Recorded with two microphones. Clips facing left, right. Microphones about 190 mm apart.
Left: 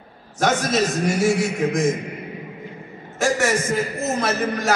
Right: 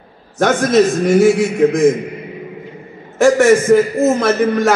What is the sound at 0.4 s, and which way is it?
Speech, 55° right (ahead or behind).